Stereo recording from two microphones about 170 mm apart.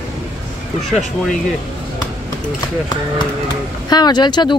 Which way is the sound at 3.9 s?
25° left (ahead or behind).